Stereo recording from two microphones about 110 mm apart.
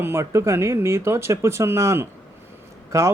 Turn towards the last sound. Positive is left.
turn(degrees=-25)  # may be behind; listen again after turning